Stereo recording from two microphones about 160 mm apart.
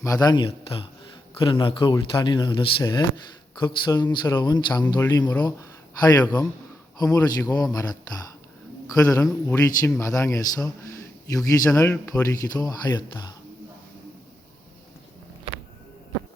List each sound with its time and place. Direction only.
0.0 s speech: 20° left (ahead or behind)